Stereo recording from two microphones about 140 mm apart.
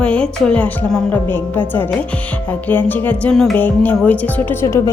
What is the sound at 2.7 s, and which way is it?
Speech, 15° left (ahead or behind).